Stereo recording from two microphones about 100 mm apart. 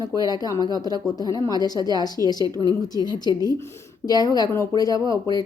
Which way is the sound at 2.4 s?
40° right (ahead or behind).